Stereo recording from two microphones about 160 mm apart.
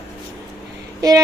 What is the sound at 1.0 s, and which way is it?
Speech, 25° right (ahead or behind).